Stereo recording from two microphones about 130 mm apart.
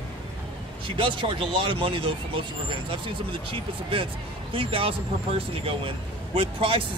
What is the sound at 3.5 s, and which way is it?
Speech, 45° right (ahead or behind).